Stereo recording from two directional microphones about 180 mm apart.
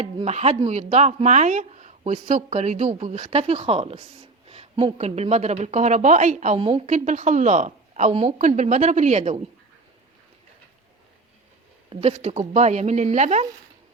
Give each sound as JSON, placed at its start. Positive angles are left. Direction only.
{"t": 0.0, "sound": "speech", "side_deg": -40}
{"t": 4.4, "sound": "a sound", "side_deg": -35}
{"t": 4.9, "sound": "speech", "side_deg": -35}
{"t": 11.9, "sound": "speech", "side_deg": -35}